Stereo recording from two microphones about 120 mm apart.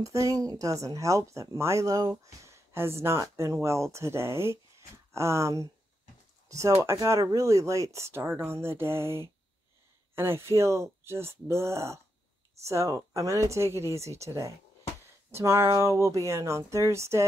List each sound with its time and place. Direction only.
0.0 s speech: 30° right (ahead or behind)